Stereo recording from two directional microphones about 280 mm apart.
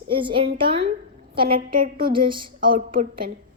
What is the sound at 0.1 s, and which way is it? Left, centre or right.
Speech, centre.